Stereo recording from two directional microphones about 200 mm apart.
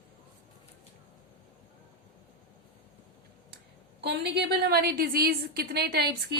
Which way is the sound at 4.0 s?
55° right (ahead or behind).